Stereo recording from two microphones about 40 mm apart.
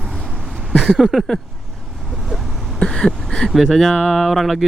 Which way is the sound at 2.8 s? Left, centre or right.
Centre.